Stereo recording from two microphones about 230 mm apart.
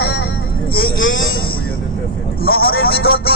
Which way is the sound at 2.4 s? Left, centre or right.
Left.